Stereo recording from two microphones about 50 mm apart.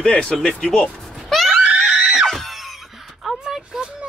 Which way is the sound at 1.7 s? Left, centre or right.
Right.